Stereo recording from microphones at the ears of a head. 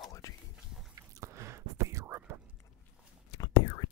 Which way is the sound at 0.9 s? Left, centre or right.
Right.